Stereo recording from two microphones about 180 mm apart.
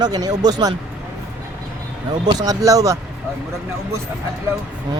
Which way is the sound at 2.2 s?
20° right (ahead or behind).